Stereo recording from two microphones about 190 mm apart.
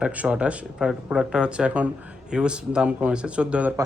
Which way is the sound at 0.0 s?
5° right (ahead or behind).